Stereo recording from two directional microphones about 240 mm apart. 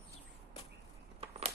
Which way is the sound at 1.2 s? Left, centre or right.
Right.